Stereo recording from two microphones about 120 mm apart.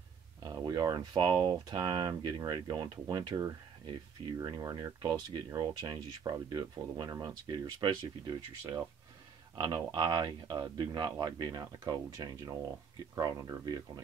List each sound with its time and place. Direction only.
0.4 s speech: 35° right (ahead or behind)